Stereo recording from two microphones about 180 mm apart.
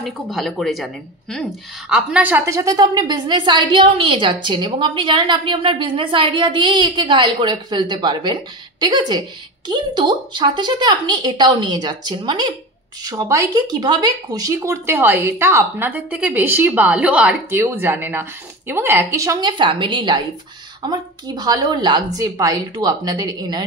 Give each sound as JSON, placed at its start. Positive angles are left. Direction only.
{"t": 0.0, "sound": "a woman's voice", "side_deg": 0}